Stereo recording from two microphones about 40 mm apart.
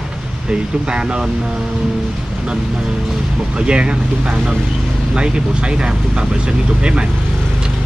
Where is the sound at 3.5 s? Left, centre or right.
Right.